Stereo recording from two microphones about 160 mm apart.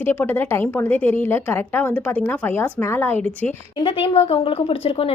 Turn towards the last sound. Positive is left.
turn(degrees=35)  # may be behind; listen again after turning